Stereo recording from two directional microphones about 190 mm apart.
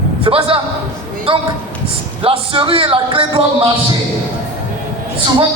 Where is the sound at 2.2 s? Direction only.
30° right (ahead or behind).